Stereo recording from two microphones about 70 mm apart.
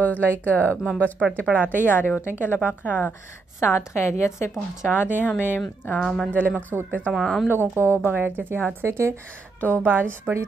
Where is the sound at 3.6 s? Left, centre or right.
Left.